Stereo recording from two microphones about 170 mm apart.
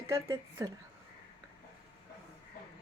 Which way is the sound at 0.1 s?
15° right (ahead or behind).